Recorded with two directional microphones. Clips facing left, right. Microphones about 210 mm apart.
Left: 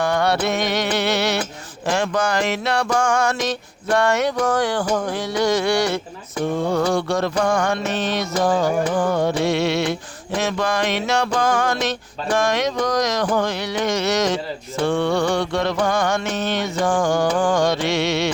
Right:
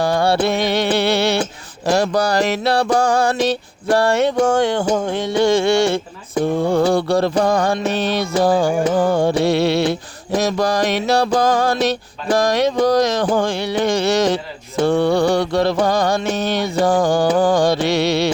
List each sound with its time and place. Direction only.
0.0 s music: 30° right (ahead or behind)